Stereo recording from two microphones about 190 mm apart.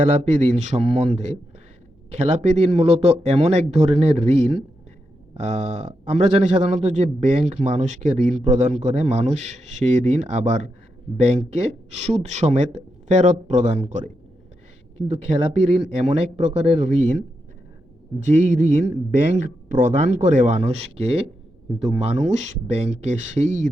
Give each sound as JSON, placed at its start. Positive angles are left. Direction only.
{"t": 0.0, "sound": "a man's voice", "side_deg": -35}
{"t": 18.3, "sound": "a man's voice", "side_deg": -45}